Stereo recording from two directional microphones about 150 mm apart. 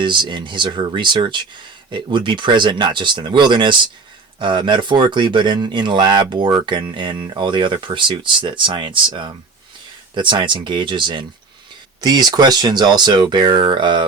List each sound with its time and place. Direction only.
0.0 s speech: 30° right (ahead or behind)